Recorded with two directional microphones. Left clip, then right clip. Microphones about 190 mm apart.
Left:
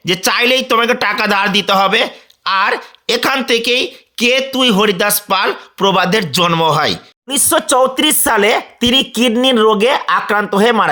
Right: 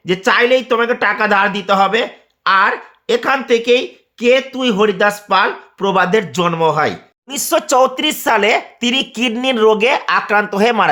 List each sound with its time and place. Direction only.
0.0 s speech: 25° left (ahead or behind); by 10.8 s 10° left (ahead or behind)